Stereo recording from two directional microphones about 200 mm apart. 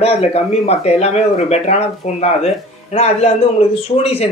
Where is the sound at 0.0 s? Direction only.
30° left (ahead or behind).